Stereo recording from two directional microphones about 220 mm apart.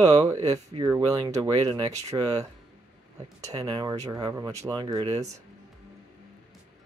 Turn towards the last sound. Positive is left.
turn(degrees=-20)  # may be behind; listen again after turning